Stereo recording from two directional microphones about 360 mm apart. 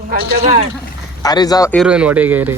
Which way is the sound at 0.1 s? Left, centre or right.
Right.